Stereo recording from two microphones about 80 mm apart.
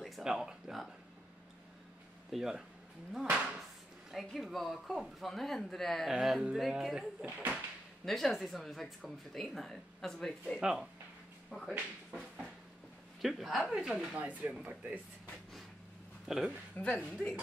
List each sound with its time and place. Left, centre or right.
0.0 s a sound: centre
2.3 s speech: centre
8.0 s speech: centre
10.6 s speech: centre
11.5 s speech: centre
13.2 s speech: centre
14.1 s speech: centre
16.3 s speech: centre
16.7 s a woman's voice: centre